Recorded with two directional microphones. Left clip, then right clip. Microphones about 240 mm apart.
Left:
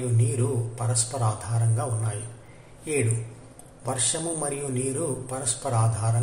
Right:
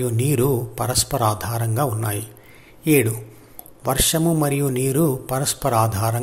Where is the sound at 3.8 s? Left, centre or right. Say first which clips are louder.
Right 8 dB; right.